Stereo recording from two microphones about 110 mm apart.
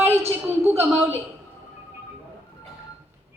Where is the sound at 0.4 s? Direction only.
25° right (ahead or behind).